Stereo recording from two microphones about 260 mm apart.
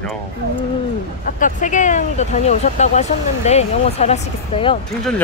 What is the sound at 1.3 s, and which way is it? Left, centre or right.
Speech, left.